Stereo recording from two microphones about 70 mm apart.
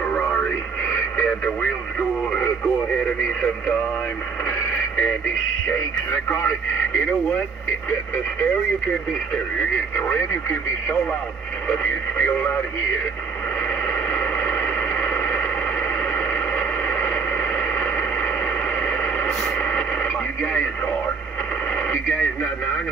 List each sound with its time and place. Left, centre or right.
1.1 s radio: left
9.9 s speech: left
14.1 s a sound: left
18.8 s radio: left
21.9 s speech: left